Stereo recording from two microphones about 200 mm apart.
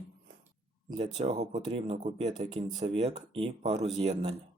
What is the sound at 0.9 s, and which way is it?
Speech, 30° right (ahead or behind).